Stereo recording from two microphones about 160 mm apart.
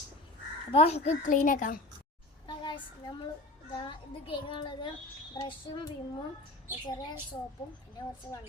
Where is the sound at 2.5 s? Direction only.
30° left (ahead or behind).